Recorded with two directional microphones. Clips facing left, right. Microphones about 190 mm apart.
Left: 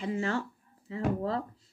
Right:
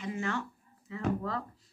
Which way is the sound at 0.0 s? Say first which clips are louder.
Left 3 dB; 30° left (ahead or behind).